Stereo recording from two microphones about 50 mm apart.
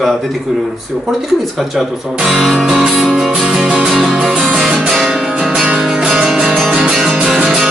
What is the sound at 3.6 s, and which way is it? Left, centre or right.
Music, right.